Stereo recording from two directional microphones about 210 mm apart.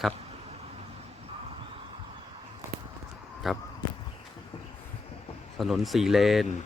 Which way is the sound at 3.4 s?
Centre (ahead or behind).